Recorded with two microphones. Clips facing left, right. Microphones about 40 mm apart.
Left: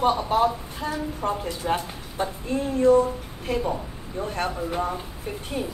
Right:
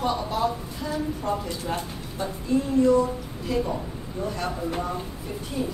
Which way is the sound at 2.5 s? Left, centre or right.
Left.